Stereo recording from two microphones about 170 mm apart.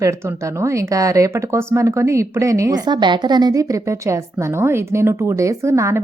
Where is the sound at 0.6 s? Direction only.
20° right (ahead or behind).